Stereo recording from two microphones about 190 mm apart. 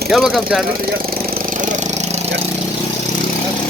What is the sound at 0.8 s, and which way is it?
Engine, 50° right (ahead or behind).